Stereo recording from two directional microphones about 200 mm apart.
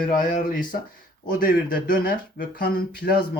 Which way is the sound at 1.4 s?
45° left (ahead or behind).